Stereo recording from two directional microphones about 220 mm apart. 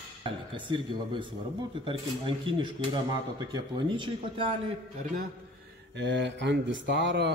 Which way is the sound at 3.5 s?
20° right (ahead or behind).